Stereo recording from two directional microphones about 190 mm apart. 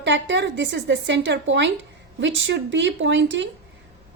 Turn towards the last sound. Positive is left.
turn(degrees=-70)  # may be behind; listen again after turning